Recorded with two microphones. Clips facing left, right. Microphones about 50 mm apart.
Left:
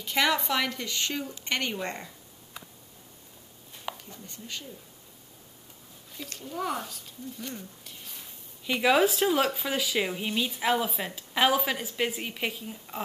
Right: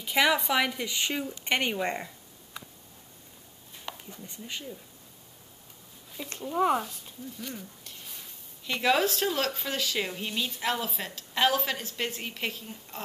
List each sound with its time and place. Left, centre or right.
0.0 s a woman's voice: centre
4.1 s a woman's voice: centre
6.2 s a woman's voice: centre
7.3 s speech: centre